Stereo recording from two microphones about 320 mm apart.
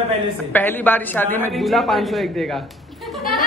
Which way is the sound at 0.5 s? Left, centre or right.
Centre.